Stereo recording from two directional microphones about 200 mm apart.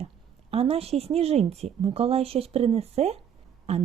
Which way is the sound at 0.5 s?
30° right (ahead or behind).